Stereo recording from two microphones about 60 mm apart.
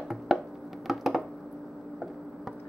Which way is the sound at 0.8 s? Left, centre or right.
Centre.